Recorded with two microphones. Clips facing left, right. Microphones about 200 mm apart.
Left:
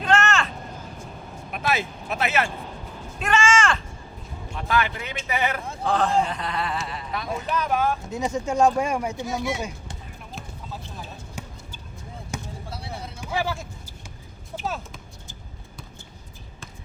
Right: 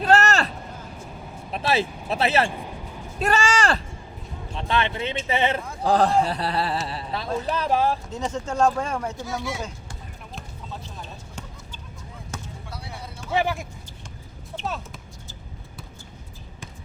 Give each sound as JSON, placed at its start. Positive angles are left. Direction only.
{"t": 0.0, "sound": "vehicle", "side_deg": -40}
{"t": 1.5, "sound": "speech", "side_deg": -30}
{"t": 4.7, "sound": "speech", "side_deg": -25}
{"t": 5.8, "sound": "speech", "side_deg": -35}
{"t": 8.1, "sound": "speech", "side_deg": 10}
{"t": 11.4, "sound": "basketball bounce", "side_deg": 10}
{"t": 13.3, "sound": "speech", "side_deg": -20}
{"t": 14.5, "sound": "a sound", "side_deg": 5}